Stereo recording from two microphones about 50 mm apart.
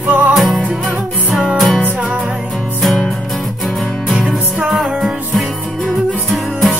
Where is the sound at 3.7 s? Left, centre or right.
Centre.